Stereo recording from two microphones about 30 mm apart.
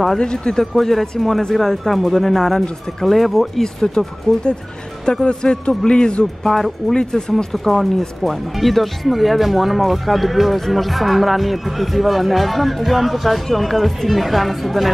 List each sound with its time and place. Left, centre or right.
0.2 s speech: left
0.6 s speech: centre
1.5 s speech: centre
3.6 s speech: centre
5.2 s speech: left
6.4 s speech: centre
6.9 s speech: left
7.5 s speech: centre